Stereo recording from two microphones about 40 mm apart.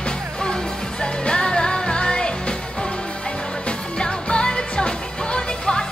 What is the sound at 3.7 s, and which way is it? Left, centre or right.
Music, left.